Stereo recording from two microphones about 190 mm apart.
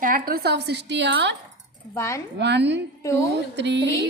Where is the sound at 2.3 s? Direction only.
65° right (ahead or behind).